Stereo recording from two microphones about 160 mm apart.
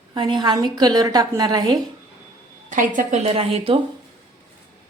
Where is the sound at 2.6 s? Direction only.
55° right (ahead or behind).